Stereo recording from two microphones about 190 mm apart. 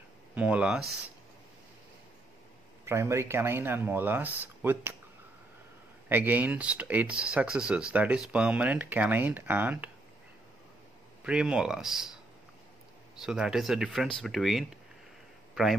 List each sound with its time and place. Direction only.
0.3 s speech: 5° right (ahead or behind)
2.8 s speech: 15° right (ahead or behind)
6.0 s speech: 10° right (ahead or behind)
11.2 s speech: 5° right (ahead or behind)
13.2 s speech: 5° right (ahead or behind)